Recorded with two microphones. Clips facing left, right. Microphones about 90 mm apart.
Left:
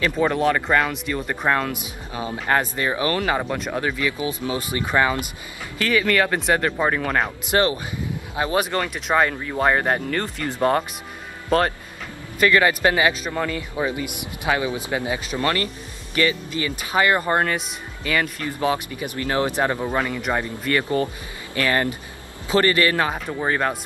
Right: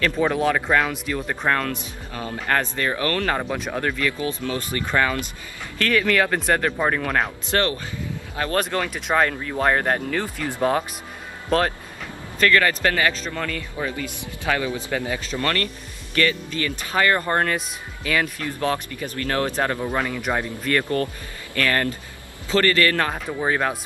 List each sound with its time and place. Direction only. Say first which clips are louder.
0.2 s speech: left 2 dB; centre (ahead or behind)
1.5 s speech: left 1 dB; 10° left (ahead or behind)
3.3 s speech: left 1 dB; centre (ahead or behind); by 5.3 s 15° left (ahead or behind)
5.8 s speech: even; 5° left (ahead or behind)
7.5 s speech: left 3 dB; 15° left (ahead or behind)
19.9 s a man's voice: left 1 dB; centre (ahead or behind); by 23.0 s 20° left (ahead or behind)
23.0 s speech: even; centre (ahead or behind)